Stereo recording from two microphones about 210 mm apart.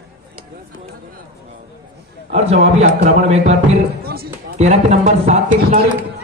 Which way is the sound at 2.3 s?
30° right (ahead or behind).